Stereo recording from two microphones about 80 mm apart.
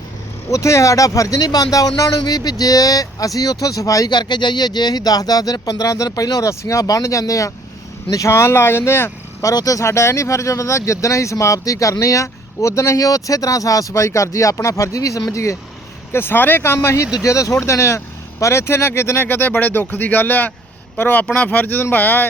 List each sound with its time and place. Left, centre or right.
0.5 s speech: left
4.1 s speech: left
16.1 s speech: left